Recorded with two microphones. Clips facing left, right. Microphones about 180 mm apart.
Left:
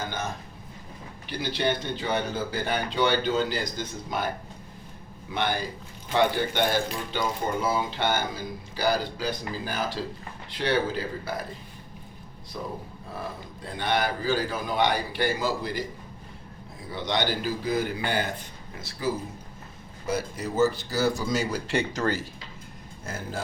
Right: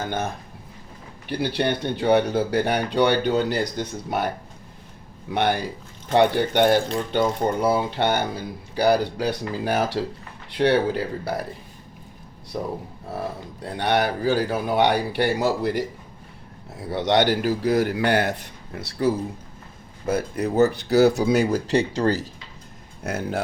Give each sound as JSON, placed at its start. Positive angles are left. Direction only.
{"t": 1.3, "sound": "speech", "side_deg": -60}
{"t": 5.3, "sound": "speech", "side_deg": -65}
{"t": 10.6, "sound": "speech", "side_deg": -65}
{"t": 12.5, "sound": "speech", "side_deg": -55}
{"t": 13.7, "sound": "a man's voice", "side_deg": -70}
{"t": 16.8, "sound": "a man's voice", "side_deg": -75}
{"t": 21.5, "sound": "speech", "side_deg": -35}
{"t": 23.0, "sound": "a man's voice", "side_deg": -70}